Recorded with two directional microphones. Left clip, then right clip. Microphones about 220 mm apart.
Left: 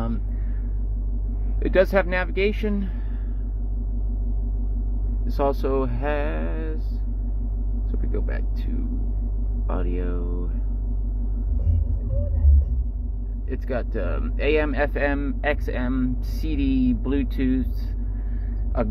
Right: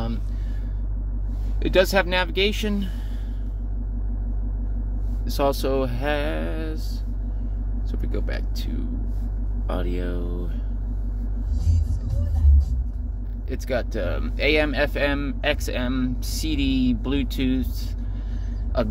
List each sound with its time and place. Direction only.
1.6 s speech: 20° right (ahead or behind)
5.2 s speech: 25° right (ahead or behind)
7.9 s speech: 25° right (ahead or behind)
9.7 s speech: 25° right (ahead or behind)
13.5 s speech: 20° right (ahead or behind)